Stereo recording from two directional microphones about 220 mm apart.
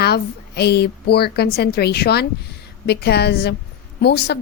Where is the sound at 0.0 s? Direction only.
45° left (ahead or behind).